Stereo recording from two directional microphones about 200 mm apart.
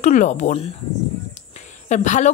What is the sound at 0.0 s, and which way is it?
A woman's voice, 35° left (ahead or behind).